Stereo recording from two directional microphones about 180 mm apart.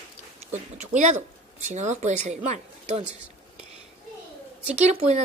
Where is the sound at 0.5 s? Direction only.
40° right (ahead or behind).